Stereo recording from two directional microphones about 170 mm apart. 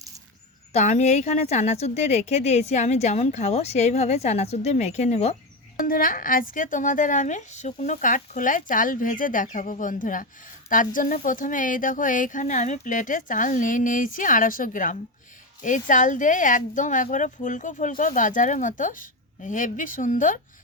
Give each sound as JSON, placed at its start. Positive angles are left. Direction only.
{"t": 0.7, "sound": "speech", "side_deg": 40}
{"t": 5.7, "sound": "speech", "side_deg": 55}